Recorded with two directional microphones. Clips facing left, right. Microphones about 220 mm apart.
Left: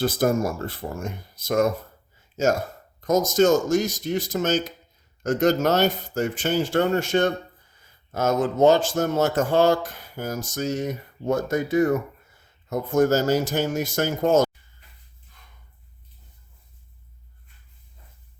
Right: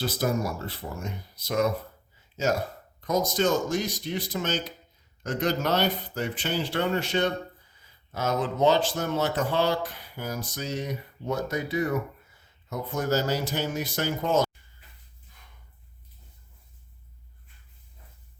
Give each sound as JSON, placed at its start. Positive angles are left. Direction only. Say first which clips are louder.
{"t": 0.0, "sound": "speech", "louder": "left 6 dB", "side_deg": 50}
{"t": 3.0, "sound": "speech", "louder": "left 6 dB", "side_deg": 45}